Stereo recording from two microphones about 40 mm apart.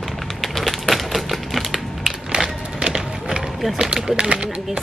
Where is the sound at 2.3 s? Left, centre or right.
Right.